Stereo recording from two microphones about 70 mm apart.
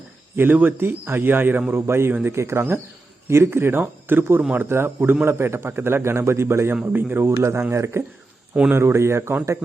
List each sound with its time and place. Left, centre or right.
0.3 s a man's voice: right